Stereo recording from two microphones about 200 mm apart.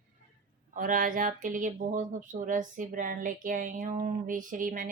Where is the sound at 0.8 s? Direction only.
40° right (ahead or behind).